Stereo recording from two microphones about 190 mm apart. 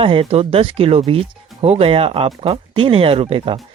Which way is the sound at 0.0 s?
30° right (ahead or behind).